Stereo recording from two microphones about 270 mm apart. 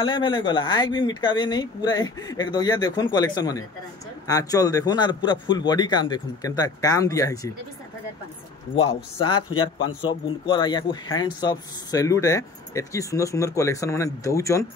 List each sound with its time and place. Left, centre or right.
0.0 s speech: centre
9.2 s speech: centre
9.6 s a man's voice: left
10.2 s speech: centre